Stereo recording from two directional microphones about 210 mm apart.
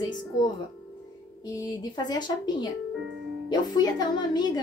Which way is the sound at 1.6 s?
20° left (ahead or behind).